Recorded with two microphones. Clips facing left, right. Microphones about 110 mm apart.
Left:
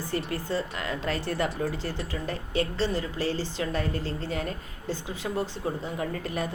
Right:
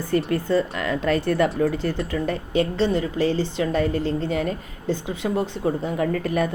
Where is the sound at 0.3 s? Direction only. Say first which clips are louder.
Right 9 dB; 55° right (ahead or behind).